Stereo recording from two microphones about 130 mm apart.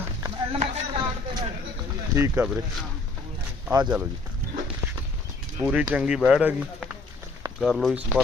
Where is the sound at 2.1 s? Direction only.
20° right (ahead or behind).